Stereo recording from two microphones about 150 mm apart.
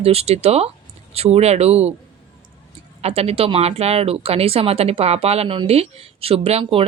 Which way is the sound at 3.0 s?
40° right (ahead or behind).